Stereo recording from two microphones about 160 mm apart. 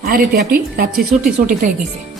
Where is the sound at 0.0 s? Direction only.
65° right (ahead or behind).